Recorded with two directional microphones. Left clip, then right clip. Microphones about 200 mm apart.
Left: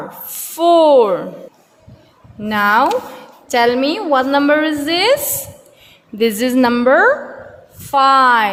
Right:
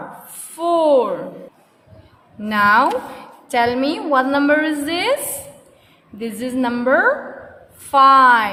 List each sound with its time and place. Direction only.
0.5 s speech: 30° left (ahead or behind)
2.4 s a woman's voice: 15° left (ahead or behind)
6.1 s a woman's voice: 35° left (ahead or behind)